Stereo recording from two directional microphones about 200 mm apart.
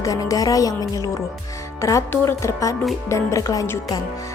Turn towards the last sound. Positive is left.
turn(degrees=15)  # may be behind; listen again after turning